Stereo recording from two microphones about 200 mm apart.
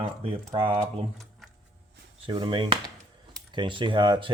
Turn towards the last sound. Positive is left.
turn(degrees=-25)  # may be behind; listen again after turning